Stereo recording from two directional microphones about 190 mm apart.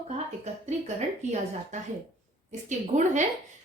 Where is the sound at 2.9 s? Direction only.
35° right (ahead or behind).